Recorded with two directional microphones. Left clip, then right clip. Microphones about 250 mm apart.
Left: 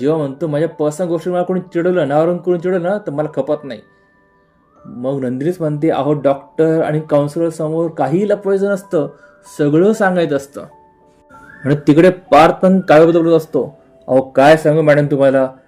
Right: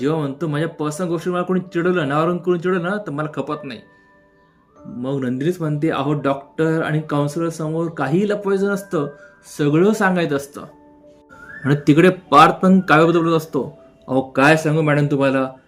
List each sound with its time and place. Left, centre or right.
0.0 s speech: centre
5.0 s speech: centre